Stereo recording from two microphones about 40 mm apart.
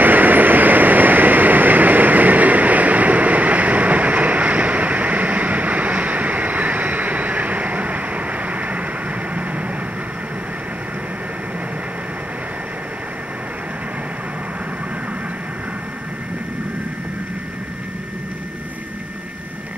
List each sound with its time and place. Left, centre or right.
0.0 s vehicle: right